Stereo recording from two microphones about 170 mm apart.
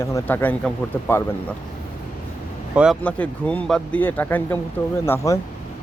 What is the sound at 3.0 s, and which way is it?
Speech, 10° left (ahead or behind).